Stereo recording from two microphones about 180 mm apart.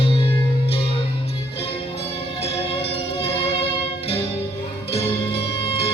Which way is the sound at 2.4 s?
30° left (ahead or behind).